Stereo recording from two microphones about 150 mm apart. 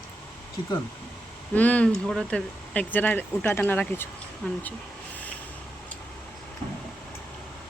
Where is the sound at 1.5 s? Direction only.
10° left (ahead or behind).